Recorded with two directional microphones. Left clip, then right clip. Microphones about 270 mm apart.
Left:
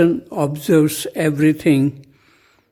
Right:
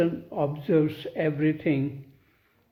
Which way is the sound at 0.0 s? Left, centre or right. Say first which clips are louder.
Left 9 dB; left.